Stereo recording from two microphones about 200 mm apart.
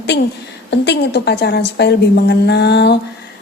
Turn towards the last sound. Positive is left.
turn(degrees=55)  # may be behind; listen again after turning